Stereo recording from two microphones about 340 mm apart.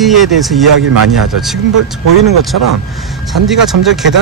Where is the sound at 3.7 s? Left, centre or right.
Right.